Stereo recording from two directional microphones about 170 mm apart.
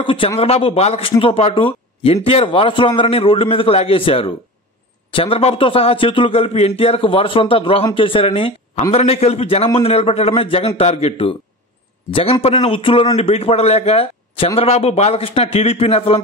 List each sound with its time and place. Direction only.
0.0 s speech: 30° left (ahead or behind)